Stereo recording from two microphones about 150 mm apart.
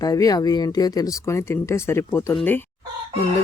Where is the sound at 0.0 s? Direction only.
25° left (ahead or behind).